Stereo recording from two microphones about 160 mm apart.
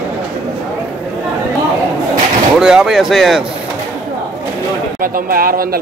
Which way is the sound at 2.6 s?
5° right (ahead or behind).